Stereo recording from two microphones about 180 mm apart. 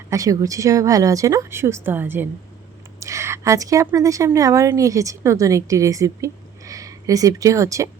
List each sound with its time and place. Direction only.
0.1 s a woman's voice: 20° right (ahead or behind)